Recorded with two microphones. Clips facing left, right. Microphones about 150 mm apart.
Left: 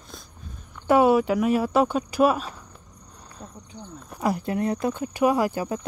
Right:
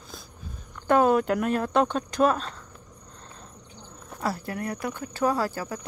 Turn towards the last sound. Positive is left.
turn(degrees=15)  # may be behind; listen again after turning